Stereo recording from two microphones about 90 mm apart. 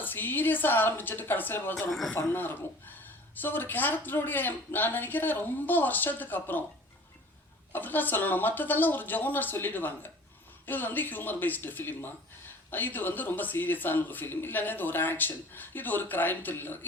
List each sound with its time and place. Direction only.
0.0 s speech: 20° left (ahead or behind)
7.7 s speech: 20° left (ahead or behind)